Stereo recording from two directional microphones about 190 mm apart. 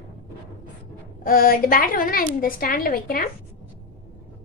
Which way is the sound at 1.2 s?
50° left (ahead or behind).